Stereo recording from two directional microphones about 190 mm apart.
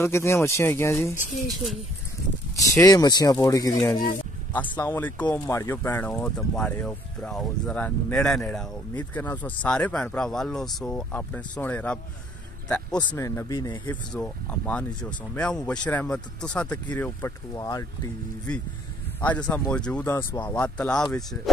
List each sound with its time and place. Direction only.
0.0 s speech: 15° left (ahead or behind)
1.1 s speech: 40° left (ahead or behind)
2.5 s speech: 15° left (ahead or behind)
14.1 s speech: 5° left (ahead or behind)
19.2 s speech: 5° left (ahead or behind)